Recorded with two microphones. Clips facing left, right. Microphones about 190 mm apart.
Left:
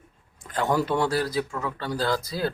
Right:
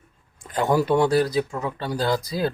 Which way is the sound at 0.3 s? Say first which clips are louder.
Right 3 dB; 15° right (ahead or behind).